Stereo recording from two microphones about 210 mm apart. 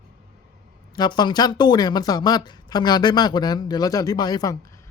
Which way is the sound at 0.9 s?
20° left (ahead or behind).